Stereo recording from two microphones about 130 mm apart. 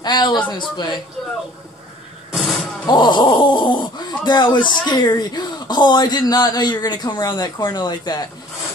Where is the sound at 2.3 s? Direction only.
Centre (ahead or behind).